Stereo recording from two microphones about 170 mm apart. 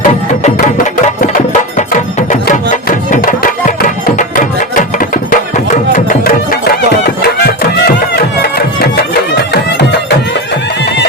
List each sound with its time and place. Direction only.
1.7 s music: 45° left (ahead or behind)
7.2 s music: 65° left (ahead or behind)